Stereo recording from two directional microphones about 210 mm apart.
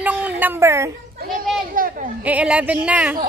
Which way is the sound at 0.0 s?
5° right (ahead or behind).